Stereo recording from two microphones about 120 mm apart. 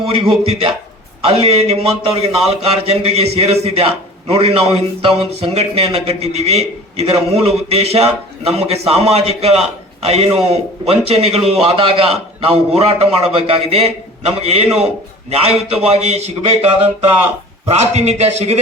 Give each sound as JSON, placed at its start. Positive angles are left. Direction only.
{"t": 0.1, "sound": "a man's voice", "side_deg": -50}
{"t": 17.7, "sound": "a man's voice", "side_deg": -65}